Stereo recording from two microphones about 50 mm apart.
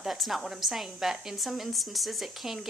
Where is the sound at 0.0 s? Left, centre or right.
Centre.